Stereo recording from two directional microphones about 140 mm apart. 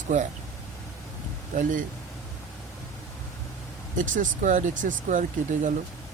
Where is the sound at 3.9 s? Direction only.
65° right (ahead or behind).